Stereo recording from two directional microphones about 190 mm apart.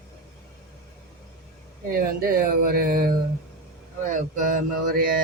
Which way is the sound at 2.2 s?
50° right (ahead or behind).